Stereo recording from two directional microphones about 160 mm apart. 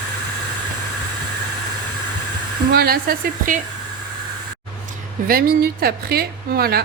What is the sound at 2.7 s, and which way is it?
Speech, 70° right (ahead or behind).